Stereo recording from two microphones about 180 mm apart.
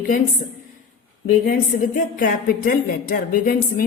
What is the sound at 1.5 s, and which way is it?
A woman's voice, 50° left (ahead or behind).